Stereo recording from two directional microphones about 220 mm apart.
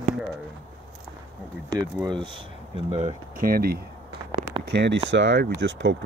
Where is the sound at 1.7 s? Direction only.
15° right (ahead or behind).